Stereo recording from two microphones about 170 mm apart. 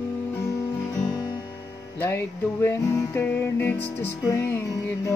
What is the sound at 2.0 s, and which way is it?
Music, 15° left (ahead or behind).